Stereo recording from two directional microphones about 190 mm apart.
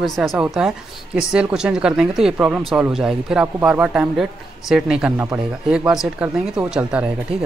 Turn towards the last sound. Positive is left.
turn(degrees=-5)  # may be behind; listen again after turning